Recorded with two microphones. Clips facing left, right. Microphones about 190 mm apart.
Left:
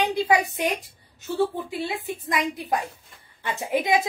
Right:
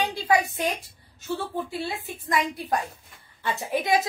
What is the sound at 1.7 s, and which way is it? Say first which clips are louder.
Speech: left 3 dB; 20° left (ahead or behind).